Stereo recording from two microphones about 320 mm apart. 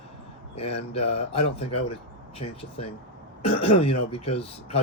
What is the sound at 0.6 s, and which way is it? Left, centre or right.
Speech, centre.